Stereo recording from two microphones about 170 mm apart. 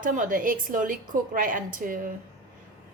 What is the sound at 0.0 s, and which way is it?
A woman's voice, 50° right (ahead or behind).